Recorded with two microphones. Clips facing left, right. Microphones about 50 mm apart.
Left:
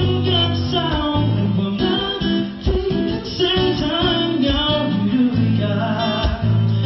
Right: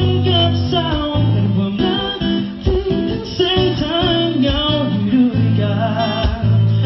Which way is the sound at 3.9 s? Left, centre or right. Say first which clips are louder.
Right 2 dB; centre.